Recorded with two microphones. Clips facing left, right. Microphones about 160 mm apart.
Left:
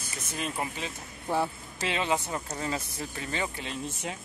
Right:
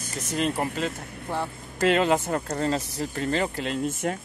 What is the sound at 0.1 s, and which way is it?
Speech, 40° right (ahead or behind).